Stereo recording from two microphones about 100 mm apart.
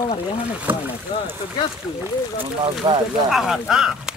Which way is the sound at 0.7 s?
20° right (ahead or behind).